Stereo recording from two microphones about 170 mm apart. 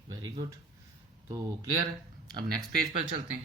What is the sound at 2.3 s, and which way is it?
Speech, 25° right (ahead or behind).